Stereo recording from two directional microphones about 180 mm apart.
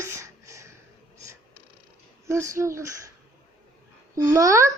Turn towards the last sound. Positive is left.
turn(degrees=-15)  # may be behind; listen again after turning